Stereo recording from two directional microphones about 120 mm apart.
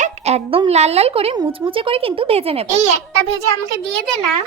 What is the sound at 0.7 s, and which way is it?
Speech, 60° right (ahead or behind).